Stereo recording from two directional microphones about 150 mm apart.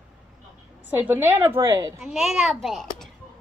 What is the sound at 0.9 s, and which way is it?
A woman's voice, 10° right (ahead or behind).